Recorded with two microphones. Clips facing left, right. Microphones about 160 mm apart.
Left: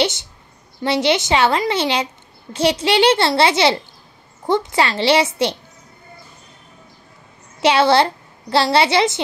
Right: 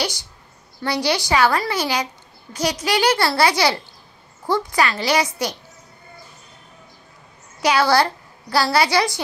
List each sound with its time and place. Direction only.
0.0 s a sound: 25° left (ahead or behind)
0.8 s a woman's voice: 25° left (ahead or behind)
7.6 s a woman's voice: 25° left (ahead or behind)